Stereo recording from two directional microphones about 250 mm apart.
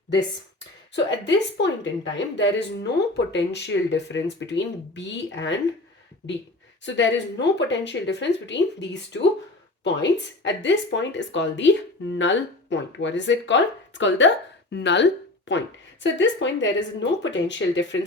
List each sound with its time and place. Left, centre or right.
0.9 s a woman's voice: left
6.8 s a woman's voice: left